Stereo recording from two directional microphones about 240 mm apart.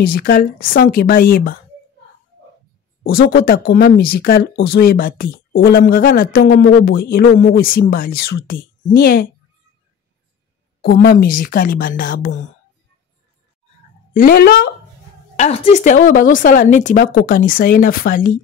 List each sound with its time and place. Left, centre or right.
0.0 s speech: left
3.0 s speech: left
10.8 s speech: left
14.1 s speech: left
15.3 s speech: left